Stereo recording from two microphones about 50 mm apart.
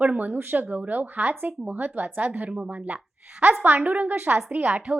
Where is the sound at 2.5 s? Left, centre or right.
Right.